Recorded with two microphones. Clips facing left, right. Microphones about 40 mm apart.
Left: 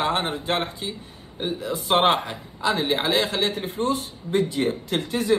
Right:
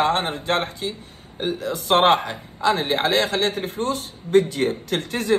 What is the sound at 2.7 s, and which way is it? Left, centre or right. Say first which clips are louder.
Speech: right 2 dB; right.